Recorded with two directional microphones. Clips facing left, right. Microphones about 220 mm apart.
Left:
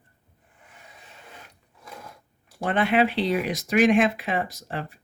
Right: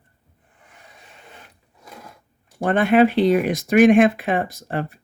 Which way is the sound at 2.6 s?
45° right (ahead or behind).